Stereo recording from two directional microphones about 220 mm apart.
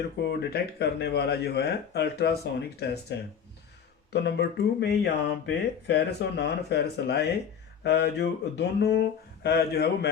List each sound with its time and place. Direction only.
0.2 s mantra: 45° left (ahead or behind)